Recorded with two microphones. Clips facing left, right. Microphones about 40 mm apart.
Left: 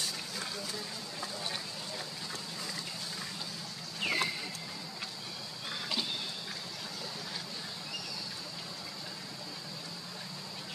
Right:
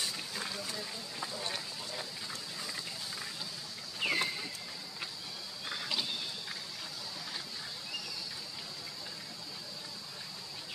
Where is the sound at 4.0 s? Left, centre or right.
Centre.